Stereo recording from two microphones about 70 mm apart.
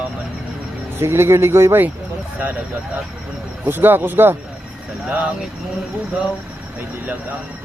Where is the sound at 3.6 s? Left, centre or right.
Right.